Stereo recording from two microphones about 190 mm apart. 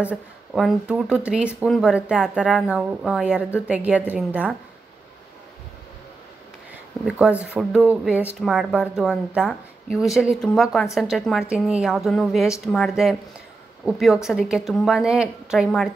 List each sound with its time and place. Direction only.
0.0 s a woman's voice: 5° right (ahead or behind)
7.1 s speech: 5° right (ahead or behind)